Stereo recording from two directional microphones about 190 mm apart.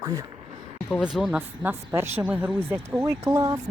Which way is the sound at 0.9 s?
Centre (ahead or behind).